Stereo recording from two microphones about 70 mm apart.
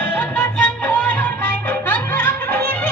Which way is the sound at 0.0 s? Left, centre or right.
Left.